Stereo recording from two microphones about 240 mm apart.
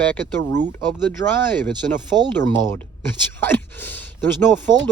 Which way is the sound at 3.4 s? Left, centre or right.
Centre.